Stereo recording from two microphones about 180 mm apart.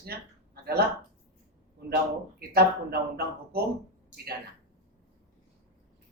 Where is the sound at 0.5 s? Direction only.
60° right (ahead or behind).